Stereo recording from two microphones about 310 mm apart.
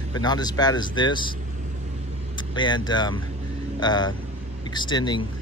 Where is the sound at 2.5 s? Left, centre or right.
Centre.